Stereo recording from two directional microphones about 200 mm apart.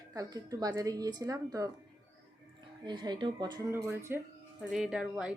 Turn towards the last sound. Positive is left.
turn(degrees=-5)  # may be behind; listen again after turning